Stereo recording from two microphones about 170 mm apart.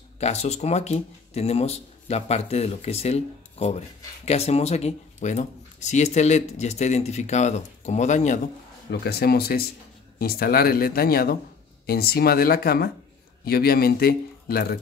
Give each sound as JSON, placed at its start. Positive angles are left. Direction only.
{"t": 0.2, "sound": "speech", "side_deg": 40}
{"t": 9.0, "sound": "speech", "side_deg": 65}